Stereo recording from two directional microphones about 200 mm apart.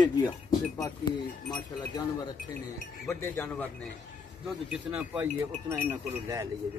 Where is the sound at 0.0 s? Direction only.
20° left (ahead or behind).